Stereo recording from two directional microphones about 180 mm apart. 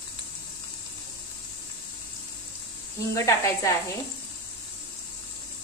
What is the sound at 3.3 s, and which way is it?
Speech, 15° left (ahead or behind).